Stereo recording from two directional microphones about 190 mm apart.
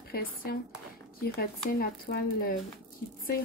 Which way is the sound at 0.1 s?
50° left (ahead or behind).